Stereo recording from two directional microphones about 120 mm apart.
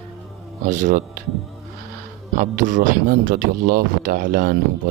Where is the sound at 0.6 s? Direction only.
90° right.